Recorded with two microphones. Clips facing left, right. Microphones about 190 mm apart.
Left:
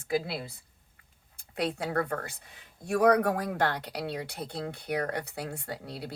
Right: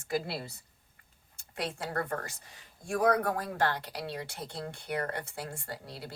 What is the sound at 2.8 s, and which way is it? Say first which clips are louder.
Speech: left 4 dB; 70° left (ahead or behind).